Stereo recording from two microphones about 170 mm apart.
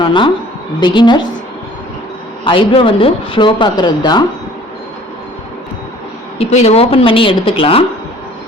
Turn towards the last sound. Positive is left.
turn(degrees=35)  # may be behind; listen again after turning